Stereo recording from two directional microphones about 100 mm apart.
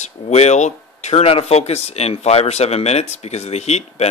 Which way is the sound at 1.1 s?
85° left.